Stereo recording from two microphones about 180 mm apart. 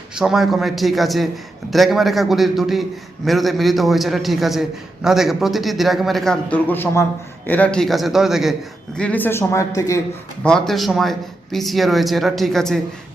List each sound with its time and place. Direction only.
0.2 s speech: centre (ahead or behind)
9.0 s speech: 10° left (ahead or behind)
10.4 s speech: 5° left (ahead or behind)